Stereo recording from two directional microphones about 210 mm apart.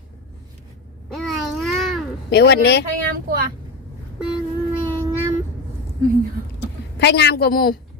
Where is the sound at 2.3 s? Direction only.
55° left (ahead or behind).